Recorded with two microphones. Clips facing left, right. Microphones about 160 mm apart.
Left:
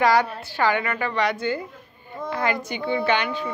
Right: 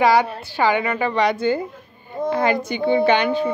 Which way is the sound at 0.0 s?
10° right (ahead or behind).